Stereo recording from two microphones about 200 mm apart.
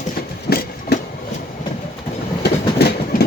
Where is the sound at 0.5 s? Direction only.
50° left (ahead or behind).